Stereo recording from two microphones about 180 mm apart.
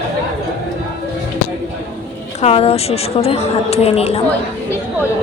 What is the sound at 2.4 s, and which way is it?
A woman's voice, 35° left (ahead or behind).